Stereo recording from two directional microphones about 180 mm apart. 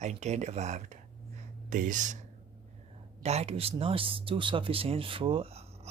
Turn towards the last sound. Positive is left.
turn(degrees=-35)  # may be behind; listen again after turning